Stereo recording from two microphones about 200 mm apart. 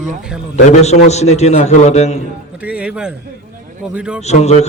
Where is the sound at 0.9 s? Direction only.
35° left (ahead or behind).